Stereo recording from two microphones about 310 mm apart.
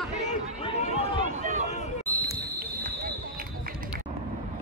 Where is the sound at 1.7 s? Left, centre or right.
Left.